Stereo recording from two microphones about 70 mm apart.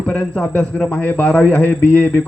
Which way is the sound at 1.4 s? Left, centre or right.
Left.